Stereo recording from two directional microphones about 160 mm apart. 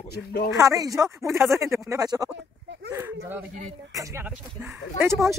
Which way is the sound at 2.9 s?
15° right (ahead or behind).